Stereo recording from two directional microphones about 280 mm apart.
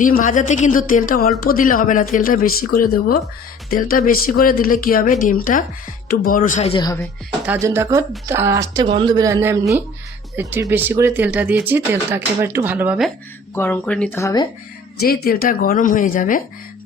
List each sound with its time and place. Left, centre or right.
0.0 s speech: left
7.4 s speech: centre
13.6 s speech: centre
15.0 s speech: left